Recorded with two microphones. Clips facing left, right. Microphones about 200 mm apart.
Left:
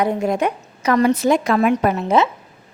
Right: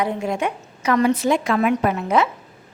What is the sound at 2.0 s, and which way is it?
Speech, 25° left (ahead or behind).